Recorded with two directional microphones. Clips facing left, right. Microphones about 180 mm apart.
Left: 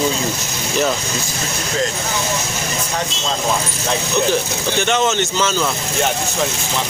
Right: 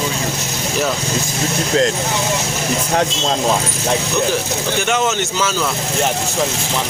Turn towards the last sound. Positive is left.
turn(degrees=-5)  # may be behind; listen again after turning